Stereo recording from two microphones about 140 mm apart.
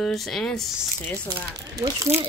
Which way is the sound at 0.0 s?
Centre (ahead or behind).